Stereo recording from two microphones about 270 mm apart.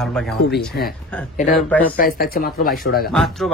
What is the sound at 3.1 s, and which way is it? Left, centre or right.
Speech, centre.